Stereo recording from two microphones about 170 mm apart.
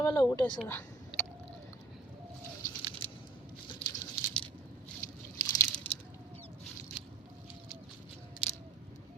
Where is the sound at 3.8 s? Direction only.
40° left (ahead or behind).